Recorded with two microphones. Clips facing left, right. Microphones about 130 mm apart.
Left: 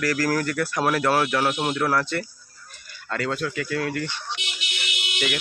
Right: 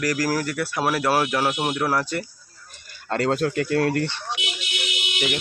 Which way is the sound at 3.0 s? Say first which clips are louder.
Right 5 dB; 40° right (ahead or behind).